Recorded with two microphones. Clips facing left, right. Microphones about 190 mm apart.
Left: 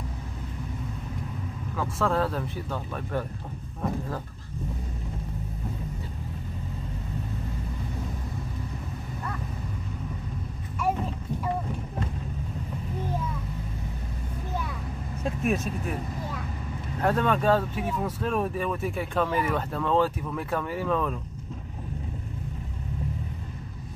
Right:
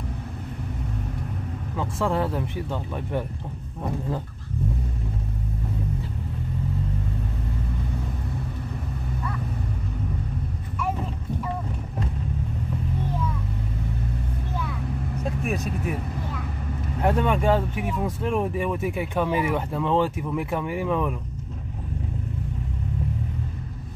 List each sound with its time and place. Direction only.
1.8 s speech: 15° right (ahead or behind)
15.4 s speech: 5° right (ahead or behind)
17.0 s speech: 15° right (ahead or behind)